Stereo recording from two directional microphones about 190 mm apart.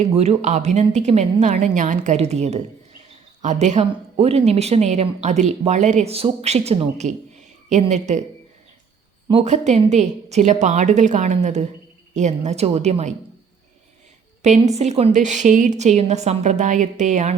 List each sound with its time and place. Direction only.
0.0 s a woman's voice: 35° right (ahead or behind)
9.3 s a woman's voice: 35° right (ahead or behind)
14.4 s a woman's voice: 35° right (ahead or behind)